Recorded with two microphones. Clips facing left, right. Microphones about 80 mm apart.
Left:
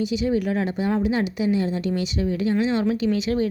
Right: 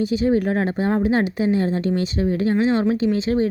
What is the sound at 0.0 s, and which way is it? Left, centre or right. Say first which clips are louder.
A woman's voice: right 4 dB; right.